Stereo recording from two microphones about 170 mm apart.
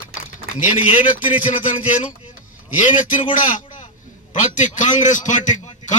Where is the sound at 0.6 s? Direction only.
50° left (ahead or behind).